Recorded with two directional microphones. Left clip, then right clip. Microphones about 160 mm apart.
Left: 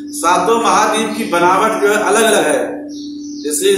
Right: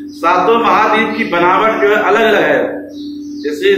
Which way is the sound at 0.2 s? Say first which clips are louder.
Right 2 dB; 30° left (ahead or behind).